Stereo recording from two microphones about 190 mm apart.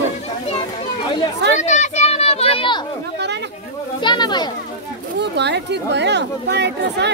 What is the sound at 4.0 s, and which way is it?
Speech, 25° left (ahead or behind).